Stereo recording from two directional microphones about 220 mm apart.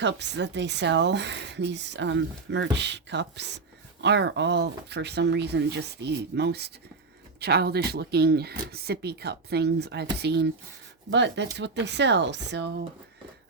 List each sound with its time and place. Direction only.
0.0 s a woman's voice: 50° right (ahead or behind)